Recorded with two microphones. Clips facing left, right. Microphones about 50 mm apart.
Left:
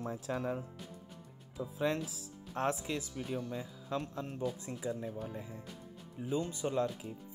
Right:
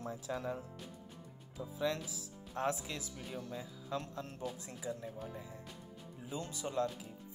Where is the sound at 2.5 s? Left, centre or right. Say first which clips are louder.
Left 2 dB; left.